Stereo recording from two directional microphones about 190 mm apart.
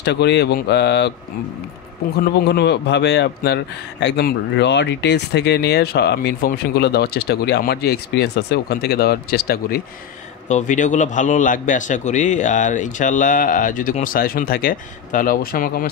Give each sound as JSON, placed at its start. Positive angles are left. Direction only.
{"t": 0.0, "sound": "speech", "side_deg": 65}
{"t": 2.3, "sound": "speech", "side_deg": 60}
{"t": 10.5, "sound": "a man's voice", "side_deg": 40}